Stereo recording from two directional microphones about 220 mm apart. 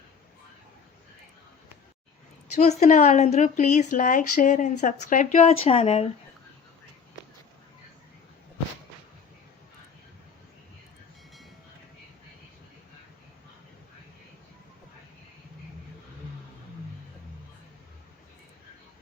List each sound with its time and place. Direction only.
2.6 s speech: 35° left (ahead or behind)